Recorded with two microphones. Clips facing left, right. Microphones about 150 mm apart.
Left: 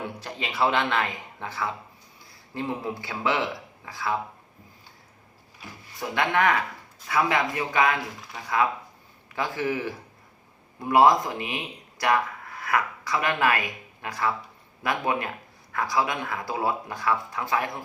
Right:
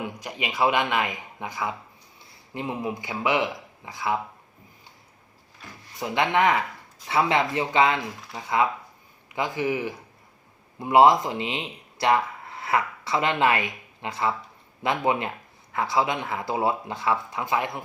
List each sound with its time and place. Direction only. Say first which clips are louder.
0.0 s speech: right 2 dB; 15° right (ahead or behind)
6.0 s speech: right 2 dB; 20° right (ahead or behind)
9.3 s speech: right 2 dB; 20° right (ahead or behind)